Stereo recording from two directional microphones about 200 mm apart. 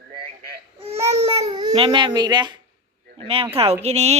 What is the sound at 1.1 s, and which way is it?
Baby cry, 35° right (ahead or behind).